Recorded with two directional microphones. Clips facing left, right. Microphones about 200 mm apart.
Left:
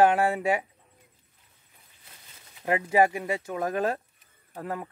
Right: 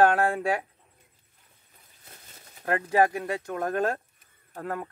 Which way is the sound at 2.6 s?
10° left (ahead or behind).